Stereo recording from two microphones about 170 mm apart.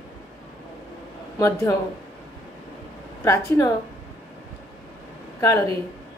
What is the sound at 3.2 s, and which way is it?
Speech, 15° left (ahead or behind).